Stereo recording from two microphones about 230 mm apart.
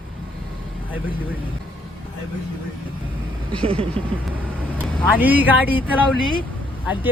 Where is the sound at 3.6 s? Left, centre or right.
Right.